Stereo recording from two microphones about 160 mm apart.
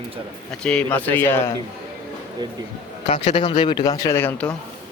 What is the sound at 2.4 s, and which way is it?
Speech, 25° right (ahead or behind).